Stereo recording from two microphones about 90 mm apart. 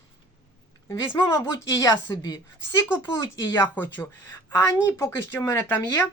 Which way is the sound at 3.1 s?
35° left (ahead or behind).